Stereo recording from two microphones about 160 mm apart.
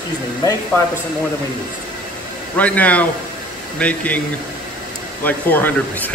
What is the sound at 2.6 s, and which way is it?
Speech, 10° left (ahead or behind).